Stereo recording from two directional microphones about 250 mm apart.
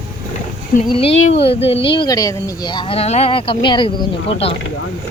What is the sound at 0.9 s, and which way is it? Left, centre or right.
Speech, left.